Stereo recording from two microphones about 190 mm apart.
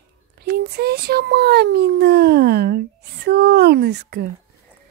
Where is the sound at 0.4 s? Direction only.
55° right (ahead or behind).